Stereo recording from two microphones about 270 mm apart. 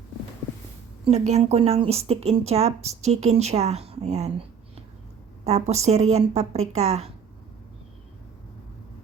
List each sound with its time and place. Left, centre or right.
1.0 s speech: right